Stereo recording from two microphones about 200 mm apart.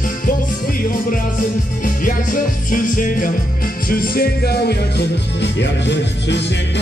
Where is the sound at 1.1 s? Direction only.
40° left (ahead or behind).